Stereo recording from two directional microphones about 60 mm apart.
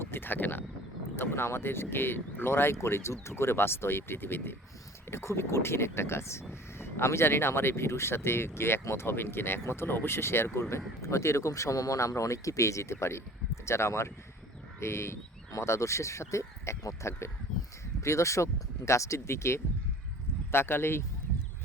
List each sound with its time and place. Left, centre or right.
0.0 s a sound: left
1.1 s speech: left
5.1 s speech: left